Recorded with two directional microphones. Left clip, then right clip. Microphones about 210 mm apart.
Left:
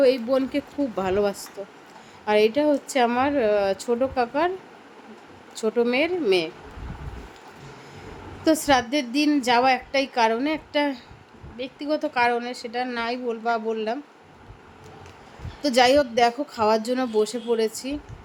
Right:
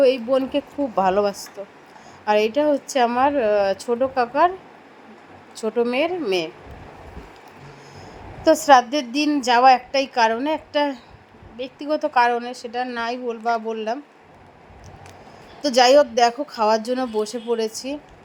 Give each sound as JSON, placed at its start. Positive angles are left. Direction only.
{"t": 0.0, "sound": "a woman's voice", "side_deg": -5}
{"t": 5.5, "sound": "a woman's voice", "side_deg": -10}
{"t": 8.4, "sound": "a woman's voice", "side_deg": -10}
{"t": 15.6, "sound": "a woman's voice", "side_deg": -10}